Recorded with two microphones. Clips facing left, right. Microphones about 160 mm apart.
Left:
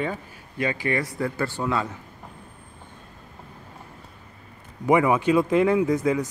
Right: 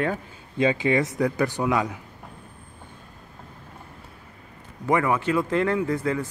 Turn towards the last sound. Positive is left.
turn(degrees=15)  # may be behind; listen again after turning